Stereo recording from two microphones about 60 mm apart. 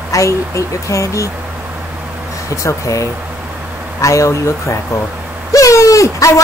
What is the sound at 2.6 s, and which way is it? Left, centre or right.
Speech, left.